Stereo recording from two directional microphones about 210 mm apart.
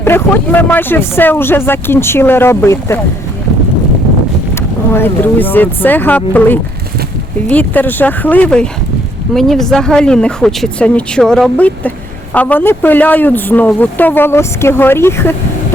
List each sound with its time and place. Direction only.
0.0 s speech: 10° left (ahead or behind)
4.9 s speech: 10° left (ahead or behind)